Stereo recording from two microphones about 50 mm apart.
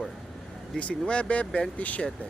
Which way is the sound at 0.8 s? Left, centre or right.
Left.